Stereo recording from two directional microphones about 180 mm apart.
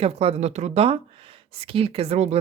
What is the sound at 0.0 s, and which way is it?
Speech, 35° right (ahead or behind).